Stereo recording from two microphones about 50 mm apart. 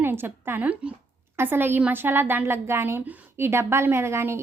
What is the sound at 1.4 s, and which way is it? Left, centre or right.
A woman's voice, right.